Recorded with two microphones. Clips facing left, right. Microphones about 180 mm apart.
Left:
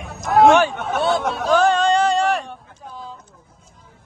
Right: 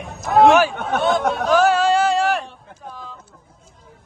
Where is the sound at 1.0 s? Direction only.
35° left (ahead or behind).